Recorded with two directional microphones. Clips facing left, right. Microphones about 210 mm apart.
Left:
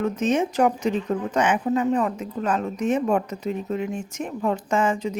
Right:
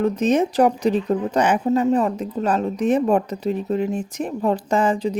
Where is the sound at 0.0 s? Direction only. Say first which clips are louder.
Right 4 dB; 35° right (ahead or behind).